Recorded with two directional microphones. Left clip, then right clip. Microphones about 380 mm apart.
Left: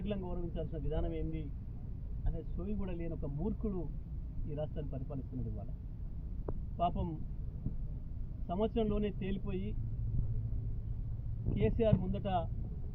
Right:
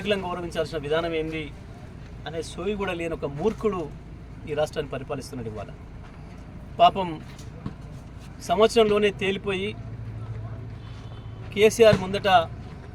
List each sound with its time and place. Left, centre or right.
0.0 s speech: centre
6.7 s speech: right
8.5 s speech: centre
11.5 s speech: centre